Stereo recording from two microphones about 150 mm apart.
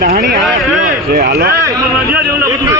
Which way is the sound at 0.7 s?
60° right (ahead or behind).